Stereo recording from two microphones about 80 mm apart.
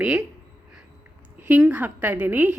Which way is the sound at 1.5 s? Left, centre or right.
Centre.